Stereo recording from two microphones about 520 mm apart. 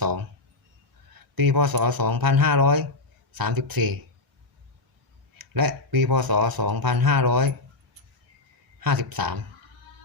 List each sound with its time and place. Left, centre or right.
0.0 s a sound: right
1.4 s speech: right
5.4 s speech: right
8.8 s speech: right